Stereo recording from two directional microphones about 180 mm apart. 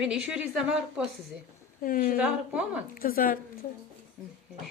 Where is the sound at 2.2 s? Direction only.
5° right (ahead or behind).